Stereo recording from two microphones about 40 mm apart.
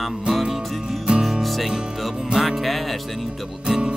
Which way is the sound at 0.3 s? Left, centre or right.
Centre.